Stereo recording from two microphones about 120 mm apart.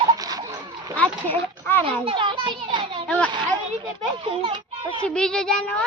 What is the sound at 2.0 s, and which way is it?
Speech, 45° right (ahead or behind).